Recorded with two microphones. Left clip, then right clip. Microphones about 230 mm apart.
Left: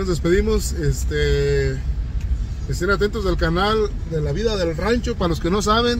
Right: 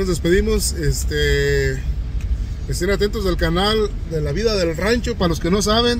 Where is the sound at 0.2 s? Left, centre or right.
Centre.